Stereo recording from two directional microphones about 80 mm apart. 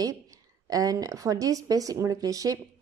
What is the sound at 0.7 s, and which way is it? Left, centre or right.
Speech, right.